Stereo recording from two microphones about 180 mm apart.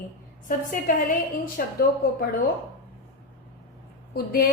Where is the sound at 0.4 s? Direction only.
50° left (ahead or behind).